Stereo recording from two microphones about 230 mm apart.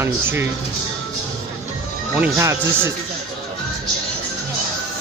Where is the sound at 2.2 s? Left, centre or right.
Centre.